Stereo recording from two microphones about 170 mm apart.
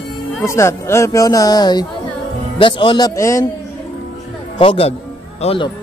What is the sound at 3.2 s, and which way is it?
Speech, 15° left (ahead or behind).